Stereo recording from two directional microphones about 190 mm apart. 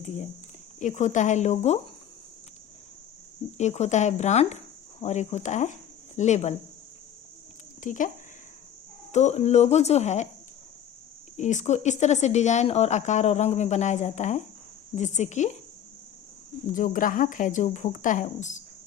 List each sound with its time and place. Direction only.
0.8 s speech: 40° left (ahead or behind)
3.6 s speech: 35° left (ahead or behind)
7.8 s speech: 45° left (ahead or behind)
9.1 s speech: 35° left (ahead or behind)
11.3 s speech: 40° left (ahead or behind)
16.6 s speech: 45° left (ahead or behind)